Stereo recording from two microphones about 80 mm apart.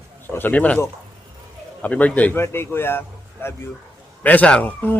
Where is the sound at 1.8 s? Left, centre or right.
Centre.